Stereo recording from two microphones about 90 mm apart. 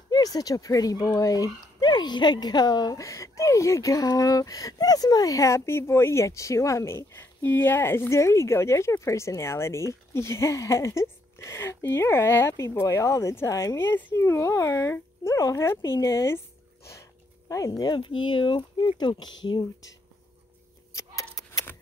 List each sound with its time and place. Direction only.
0.1 s speech: 45° left (ahead or behind)
3.0 s speech: 35° left (ahead or behind); by 19.9 s 55° left (ahead or behind)
20.9 s keys jangling: 40° left (ahead or behind)